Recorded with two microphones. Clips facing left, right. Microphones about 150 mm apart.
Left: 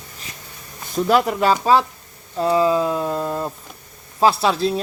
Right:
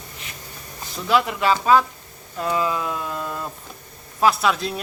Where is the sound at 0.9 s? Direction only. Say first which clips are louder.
Left 4 dB; 40° left (ahead or behind).